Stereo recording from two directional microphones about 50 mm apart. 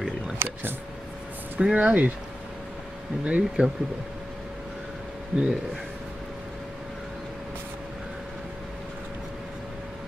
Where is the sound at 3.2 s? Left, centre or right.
Right.